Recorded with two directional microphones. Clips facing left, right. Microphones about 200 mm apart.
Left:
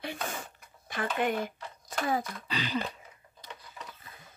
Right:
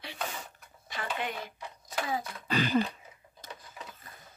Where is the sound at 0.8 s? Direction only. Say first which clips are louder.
Left 6 dB; 50° left (ahead or behind).